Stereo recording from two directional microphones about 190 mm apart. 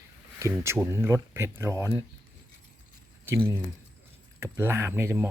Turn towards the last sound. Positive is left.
turn(degrees=-15)  # may be behind; listen again after turning